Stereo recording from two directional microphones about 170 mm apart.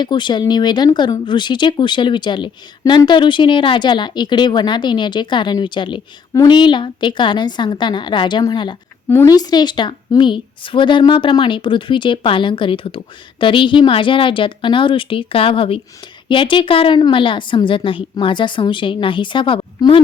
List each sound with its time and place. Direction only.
0.0 s speech: 25° left (ahead or behind)